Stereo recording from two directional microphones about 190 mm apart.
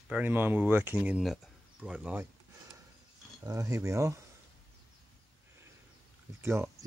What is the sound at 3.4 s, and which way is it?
Speech, 15° right (ahead or behind).